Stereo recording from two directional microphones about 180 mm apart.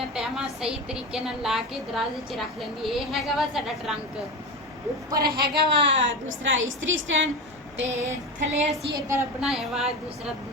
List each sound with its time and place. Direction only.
0.1 s a woman's voice: centre (ahead or behind)
5.2 s a woman's voice: 60° right (ahead or behind)
5.8 s a woman's voice: 85° right
7.9 s female singing: 40° right (ahead or behind)
8.7 s a woman's voice: 20° right (ahead or behind)
9.4 s a woman's voice: centre (ahead or behind)